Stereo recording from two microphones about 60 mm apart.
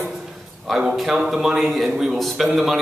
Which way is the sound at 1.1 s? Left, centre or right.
Centre.